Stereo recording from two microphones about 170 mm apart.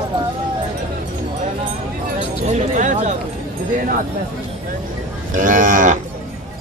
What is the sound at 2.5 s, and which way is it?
Speech, 45° right (ahead or behind).